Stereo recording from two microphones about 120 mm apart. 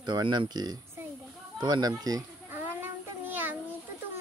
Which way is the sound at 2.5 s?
15° right (ahead or behind).